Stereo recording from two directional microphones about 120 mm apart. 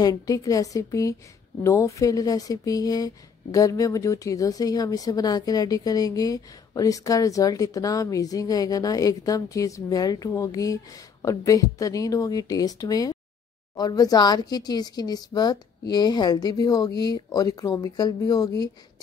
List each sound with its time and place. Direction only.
0.0 s a woman's voice: 30° left (ahead or behind)